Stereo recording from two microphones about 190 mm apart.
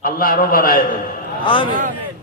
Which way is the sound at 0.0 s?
45° left (ahead or behind).